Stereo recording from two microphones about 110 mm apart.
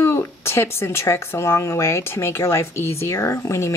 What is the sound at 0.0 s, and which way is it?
Speech, 20° left (ahead or behind).